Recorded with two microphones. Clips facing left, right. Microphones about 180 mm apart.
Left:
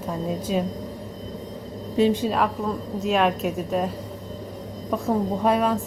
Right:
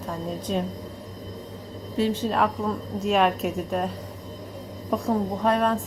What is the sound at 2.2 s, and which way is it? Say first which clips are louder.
A woman's voice: left 1 dB; centre (ahead or behind).